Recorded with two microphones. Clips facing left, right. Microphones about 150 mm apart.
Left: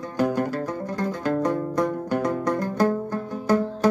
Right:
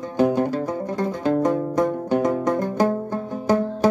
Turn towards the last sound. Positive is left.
turn(degrees=-20)  # may be behind; listen again after turning